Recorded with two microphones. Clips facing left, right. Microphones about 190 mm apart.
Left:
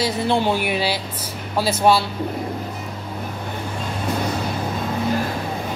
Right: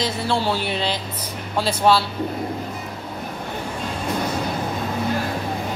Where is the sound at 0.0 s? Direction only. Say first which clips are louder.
Left 3 dB; 15° left (ahead or behind).